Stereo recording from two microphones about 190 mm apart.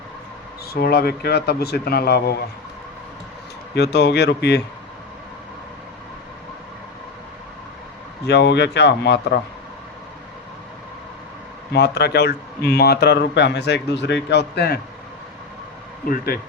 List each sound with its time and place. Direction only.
0.7 s speech: 55° left (ahead or behind)
3.8 s speech: 60° left (ahead or behind)
8.3 s speech: 60° left (ahead or behind)
11.7 s speech: 60° left (ahead or behind)
16.0 s speech: 50° left (ahead or behind)